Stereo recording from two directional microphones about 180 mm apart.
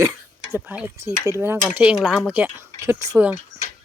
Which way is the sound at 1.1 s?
15° left (ahead or behind).